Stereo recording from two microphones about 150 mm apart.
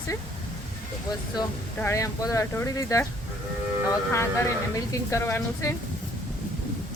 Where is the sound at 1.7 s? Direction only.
20° left (ahead or behind).